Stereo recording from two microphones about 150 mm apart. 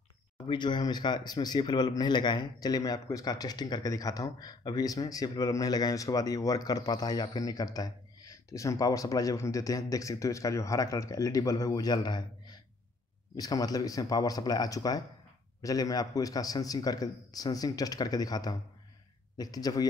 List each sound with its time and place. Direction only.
0.5 s speech: 30° left (ahead or behind)